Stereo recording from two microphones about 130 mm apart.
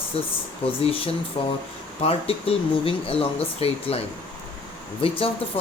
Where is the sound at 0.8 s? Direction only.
45° left (ahead or behind).